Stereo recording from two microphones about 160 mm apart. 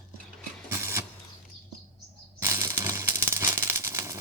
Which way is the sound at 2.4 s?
15° right (ahead or behind).